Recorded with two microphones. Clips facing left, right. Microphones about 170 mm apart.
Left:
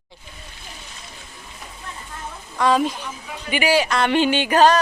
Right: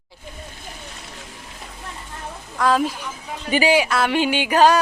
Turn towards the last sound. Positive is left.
turn(degrees=-5)  # may be behind; listen again after turning